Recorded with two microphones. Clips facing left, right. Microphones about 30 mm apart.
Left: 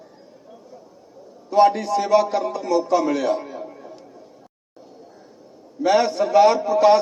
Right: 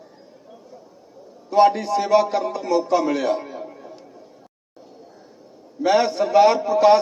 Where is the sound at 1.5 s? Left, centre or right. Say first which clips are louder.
Even; centre.